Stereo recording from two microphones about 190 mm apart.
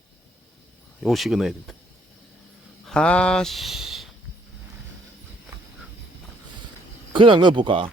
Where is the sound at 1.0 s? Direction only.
Centre (ahead or behind).